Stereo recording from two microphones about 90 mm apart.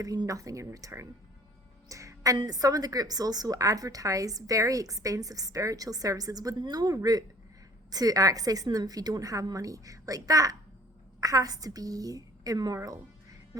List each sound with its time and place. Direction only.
0.0 s a woman's voice: 40° right (ahead or behind)
1.9 s music: 35° right (ahead or behind)
2.5 s a woman's voice: 45° right (ahead or behind)